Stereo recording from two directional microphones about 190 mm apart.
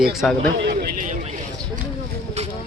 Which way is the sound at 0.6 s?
60° right (ahead or behind).